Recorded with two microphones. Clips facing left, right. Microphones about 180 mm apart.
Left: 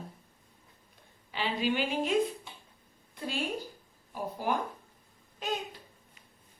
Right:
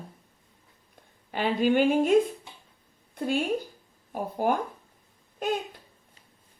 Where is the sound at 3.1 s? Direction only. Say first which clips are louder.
Right 9 dB; 50° right (ahead or behind).